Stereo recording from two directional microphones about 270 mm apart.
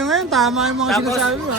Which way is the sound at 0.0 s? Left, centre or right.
Centre.